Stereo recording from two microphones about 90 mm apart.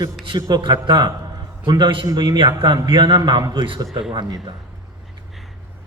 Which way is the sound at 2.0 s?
45° right (ahead or behind).